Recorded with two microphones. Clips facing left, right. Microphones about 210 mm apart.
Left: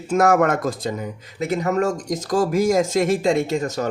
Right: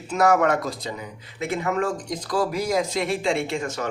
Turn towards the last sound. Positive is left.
turn(degrees=40)  # may be behind; listen again after turning